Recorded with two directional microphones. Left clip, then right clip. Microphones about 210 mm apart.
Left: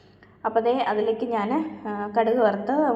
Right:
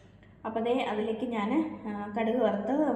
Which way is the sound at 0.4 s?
20° left (ahead or behind).